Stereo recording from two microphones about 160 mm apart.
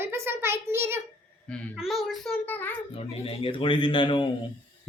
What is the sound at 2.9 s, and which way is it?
Speech, 35° left (ahead or behind).